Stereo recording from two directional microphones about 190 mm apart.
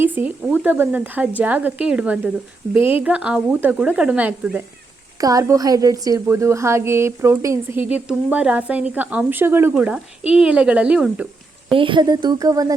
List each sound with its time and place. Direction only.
0.0 s a woman's voice: 10° right (ahead or behind)
11.7 s speech: 25° right (ahead or behind)